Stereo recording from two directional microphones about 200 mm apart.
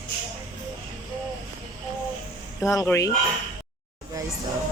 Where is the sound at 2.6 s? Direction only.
15° left (ahead or behind).